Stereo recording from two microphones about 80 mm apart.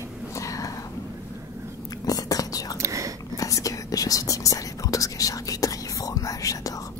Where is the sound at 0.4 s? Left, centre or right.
Left.